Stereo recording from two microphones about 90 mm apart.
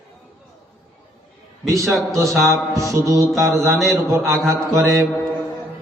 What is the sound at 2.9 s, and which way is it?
Music, 35° right (ahead or behind).